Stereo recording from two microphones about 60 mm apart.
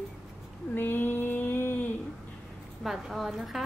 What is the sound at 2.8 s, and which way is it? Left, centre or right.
Speech, centre.